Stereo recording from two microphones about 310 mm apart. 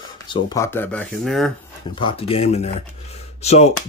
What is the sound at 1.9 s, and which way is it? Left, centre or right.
Speech, centre.